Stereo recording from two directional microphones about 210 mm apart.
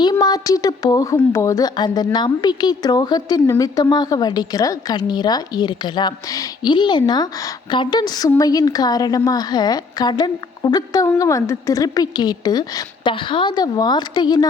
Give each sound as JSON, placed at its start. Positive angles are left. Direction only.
{"t": 0.0, "sound": "speech", "side_deg": 20}